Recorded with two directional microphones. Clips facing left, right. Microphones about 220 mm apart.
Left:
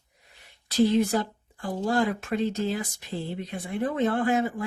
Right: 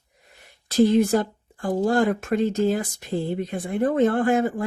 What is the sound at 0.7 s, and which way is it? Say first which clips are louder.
Speech: right 4 dB; 50° right (ahead or behind).